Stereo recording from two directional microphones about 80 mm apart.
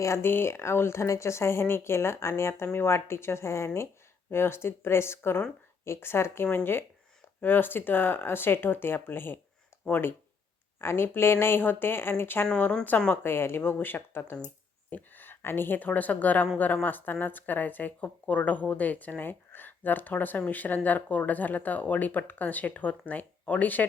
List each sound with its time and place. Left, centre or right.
0.0 s a woman's voice: left
12.5 s a woman's voice: centre